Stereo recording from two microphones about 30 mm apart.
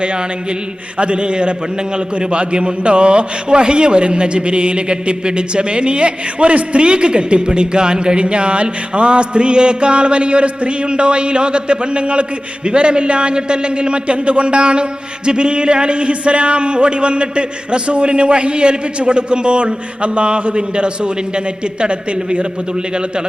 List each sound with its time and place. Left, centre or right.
0.0 s speech: right
6.8 s speech: right